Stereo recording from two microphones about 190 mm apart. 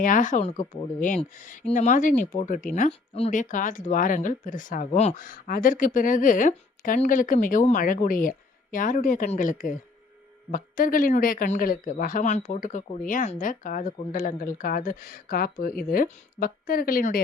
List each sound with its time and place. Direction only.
0.0 s speech: 45° left (ahead or behind)